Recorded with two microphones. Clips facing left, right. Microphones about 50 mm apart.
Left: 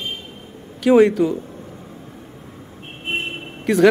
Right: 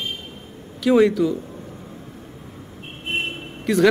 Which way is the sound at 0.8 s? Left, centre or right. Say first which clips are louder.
Left 3 dB; centre.